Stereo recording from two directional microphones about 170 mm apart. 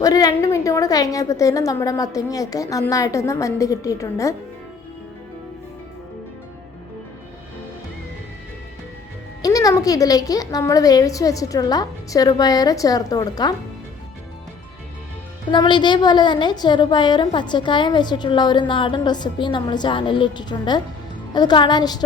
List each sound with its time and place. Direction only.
0.0 s a woman's voice: 20° left (ahead or behind)
9.4 s a woman's voice: 20° left (ahead or behind)
15.5 s a woman's voice: 25° left (ahead or behind)